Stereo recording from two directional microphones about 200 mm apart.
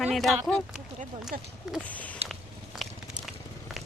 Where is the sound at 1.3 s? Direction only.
Centre (ahead or behind).